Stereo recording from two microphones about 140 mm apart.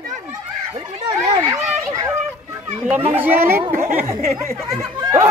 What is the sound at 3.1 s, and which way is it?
Speech, 15° right (ahead or behind).